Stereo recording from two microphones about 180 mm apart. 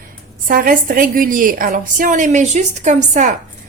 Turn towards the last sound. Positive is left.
turn(degrees=-45)  # may be behind; listen again after turning